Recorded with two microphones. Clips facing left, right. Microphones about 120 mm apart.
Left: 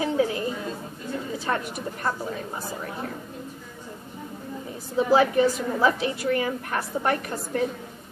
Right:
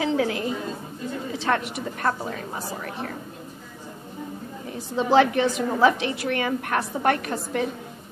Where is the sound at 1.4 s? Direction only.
90° right.